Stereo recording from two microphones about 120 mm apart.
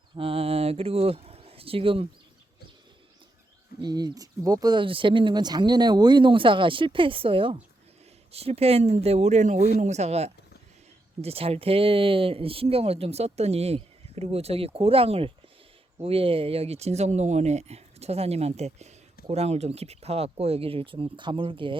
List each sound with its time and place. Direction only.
0.2 s speech: 50° right (ahead or behind)
3.8 s speech: 35° right (ahead or behind)
8.3 s speech: 60° right (ahead or behind)